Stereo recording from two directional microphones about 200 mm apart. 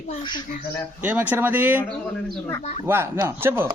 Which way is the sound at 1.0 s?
10° right (ahead or behind).